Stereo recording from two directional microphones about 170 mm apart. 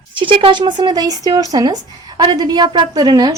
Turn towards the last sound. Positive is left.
turn(degrees=-25)  # may be behind; listen again after turning